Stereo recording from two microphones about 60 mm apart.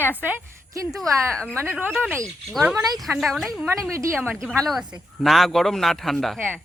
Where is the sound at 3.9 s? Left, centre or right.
Right.